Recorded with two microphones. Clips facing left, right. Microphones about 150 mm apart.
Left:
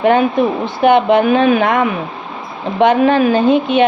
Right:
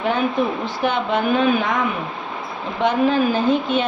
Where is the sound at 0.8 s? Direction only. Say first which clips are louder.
Left 11 dB; 65° left (ahead or behind).